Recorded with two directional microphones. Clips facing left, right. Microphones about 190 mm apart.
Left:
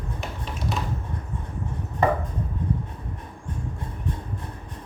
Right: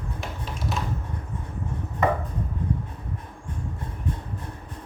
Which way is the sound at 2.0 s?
35° left (ahead or behind).